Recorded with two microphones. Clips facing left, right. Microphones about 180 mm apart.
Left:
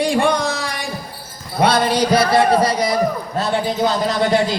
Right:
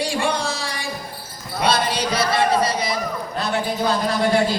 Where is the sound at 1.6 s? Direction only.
60° left (ahead or behind).